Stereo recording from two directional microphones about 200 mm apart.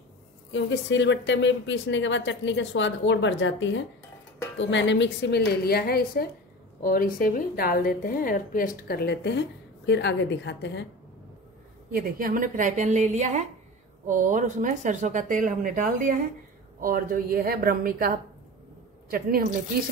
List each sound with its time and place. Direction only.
0.5 s a woman's voice: 65° left (ahead or behind)
11.9 s speech: 45° right (ahead or behind)